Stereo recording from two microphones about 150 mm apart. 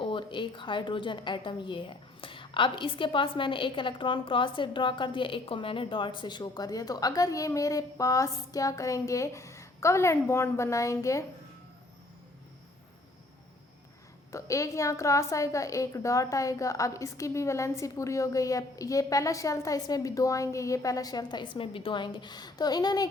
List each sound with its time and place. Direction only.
0.0 s a woman's voice: 35° left (ahead or behind)
14.3 s a woman's voice: 20° left (ahead or behind)